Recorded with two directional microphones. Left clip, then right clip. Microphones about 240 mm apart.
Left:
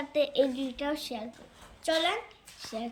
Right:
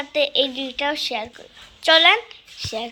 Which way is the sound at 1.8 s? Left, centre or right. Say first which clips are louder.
Right 14 dB; centre.